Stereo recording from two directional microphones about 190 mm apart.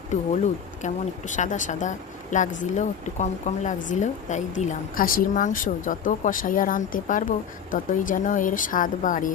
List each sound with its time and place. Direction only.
0.8 s speech: 40° left (ahead or behind)